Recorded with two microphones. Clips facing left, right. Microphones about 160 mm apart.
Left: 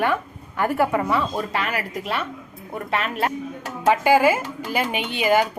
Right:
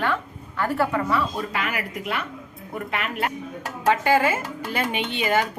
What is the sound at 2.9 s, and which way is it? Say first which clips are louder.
Speech: left 4 dB; 30° left (ahead or behind).